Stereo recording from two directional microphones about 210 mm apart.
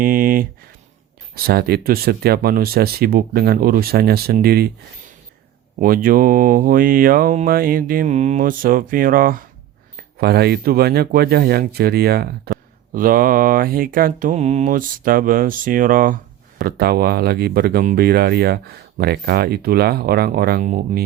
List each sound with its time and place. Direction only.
0.0 s speech: 40° right (ahead or behind)
1.5 s speech: 45° right (ahead or behind)
5.8 s speech: 45° right (ahead or behind)